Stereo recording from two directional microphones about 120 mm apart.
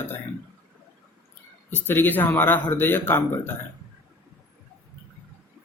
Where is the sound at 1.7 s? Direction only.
15° left (ahead or behind).